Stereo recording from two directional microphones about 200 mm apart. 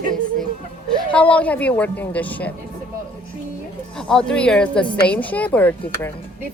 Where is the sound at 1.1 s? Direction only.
5° left (ahead or behind).